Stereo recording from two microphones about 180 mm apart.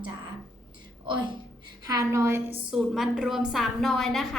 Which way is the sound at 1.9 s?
20° right (ahead or behind).